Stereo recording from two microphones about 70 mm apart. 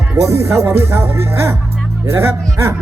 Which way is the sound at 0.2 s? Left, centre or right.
Right.